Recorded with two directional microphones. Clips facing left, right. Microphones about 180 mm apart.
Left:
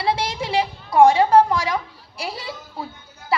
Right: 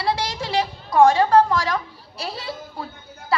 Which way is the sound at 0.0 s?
20° left (ahead or behind).